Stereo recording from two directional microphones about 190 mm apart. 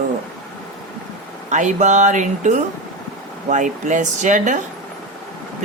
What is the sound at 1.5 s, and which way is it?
Speech, 40° right (ahead or behind).